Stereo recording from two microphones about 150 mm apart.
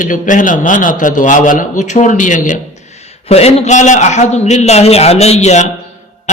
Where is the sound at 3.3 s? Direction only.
45° left (ahead or behind).